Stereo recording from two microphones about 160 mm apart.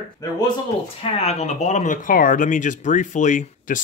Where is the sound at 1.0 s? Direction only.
40° left (ahead or behind).